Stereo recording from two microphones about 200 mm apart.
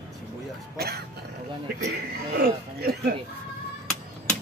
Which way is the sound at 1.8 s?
50° right (ahead or behind).